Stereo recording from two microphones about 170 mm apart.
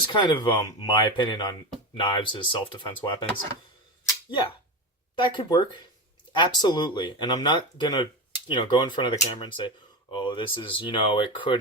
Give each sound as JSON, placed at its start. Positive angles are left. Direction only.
{"t": 0.1, "sound": "speech", "side_deg": 25}
{"t": 4.3, "sound": "speech", "side_deg": 30}